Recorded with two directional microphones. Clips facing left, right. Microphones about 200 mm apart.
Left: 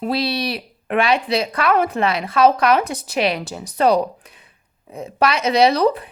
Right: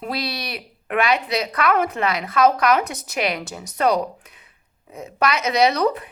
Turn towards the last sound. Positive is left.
turn(degrees=30)  # may be behind; listen again after turning